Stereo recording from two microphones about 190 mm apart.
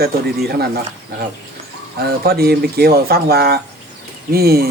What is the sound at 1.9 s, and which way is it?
Speech, 55° right (ahead or behind).